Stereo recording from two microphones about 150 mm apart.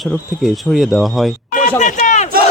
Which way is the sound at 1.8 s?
55° left (ahead or behind).